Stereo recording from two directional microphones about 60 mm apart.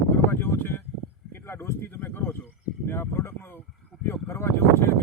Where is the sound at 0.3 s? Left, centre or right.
Left.